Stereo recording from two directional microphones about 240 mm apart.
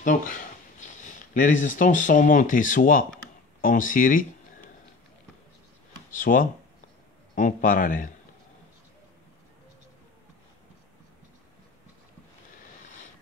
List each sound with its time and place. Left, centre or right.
0.0 s a man's voice: left
6.1 s a man's voice: left